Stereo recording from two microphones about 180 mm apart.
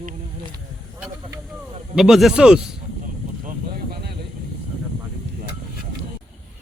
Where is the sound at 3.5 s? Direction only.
60° right (ahead or behind).